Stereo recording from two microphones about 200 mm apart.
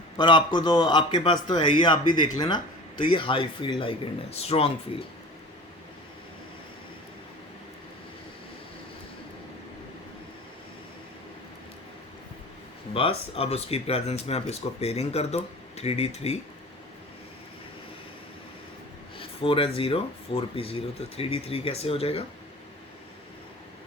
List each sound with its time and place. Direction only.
0.2 s speech: 20° left (ahead or behind)
12.9 s speech: 30° left (ahead or behind)
19.2 s speech: 25° left (ahead or behind)